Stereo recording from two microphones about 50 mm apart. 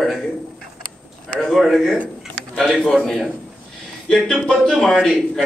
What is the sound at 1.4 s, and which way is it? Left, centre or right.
A man's voice, centre.